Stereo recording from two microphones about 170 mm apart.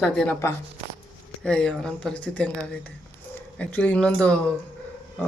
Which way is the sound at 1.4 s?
5° left (ahead or behind).